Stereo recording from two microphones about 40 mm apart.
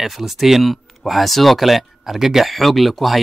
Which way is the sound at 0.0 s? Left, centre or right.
Centre.